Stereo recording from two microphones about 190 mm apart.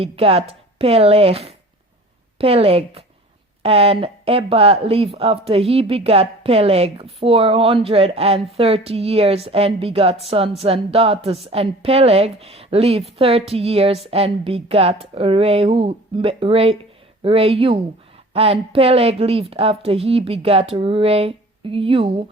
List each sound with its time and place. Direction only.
0.0 s a woman's voice: 30° right (ahead or behind)